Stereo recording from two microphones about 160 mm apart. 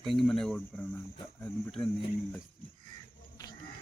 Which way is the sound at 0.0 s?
Centre (ahead or behind).